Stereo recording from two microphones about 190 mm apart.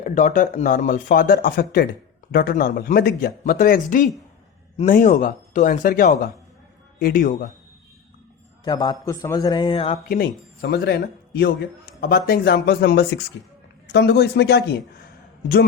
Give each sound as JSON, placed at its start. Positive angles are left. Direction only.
{"t": 0.0, "sound": "speech", "side_deg": 40}
{"t": 8.6, "sound": "a man's voice", "side_deg": 20}
{"t": 10.6, "sound": "a man's voice", "side_deg": 55}